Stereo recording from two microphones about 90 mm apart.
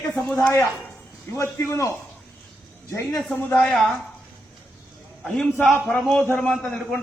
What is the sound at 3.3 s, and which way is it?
Speech, 15° left (ahead or behind).